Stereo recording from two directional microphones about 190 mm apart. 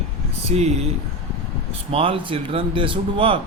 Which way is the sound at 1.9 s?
30° right (ahead or behind).